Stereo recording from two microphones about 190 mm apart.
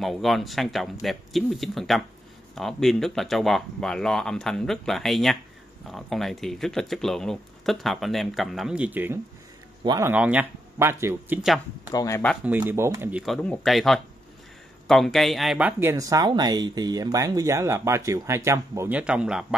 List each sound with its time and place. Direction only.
0.0 s speech: centre (ahead or behind)
11.9 s speech: 20° left (ahead or behind)
12.4 s speech: 10° right (ahead or behind)
13.2 s speech: 5° left (ahead or behind)